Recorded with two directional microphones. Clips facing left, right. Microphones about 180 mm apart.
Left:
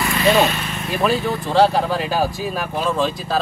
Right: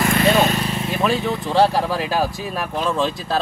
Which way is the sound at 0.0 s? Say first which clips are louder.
Even; 50° right (ahead or behind).